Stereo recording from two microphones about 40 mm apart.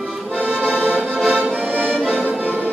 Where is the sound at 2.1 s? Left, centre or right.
Right.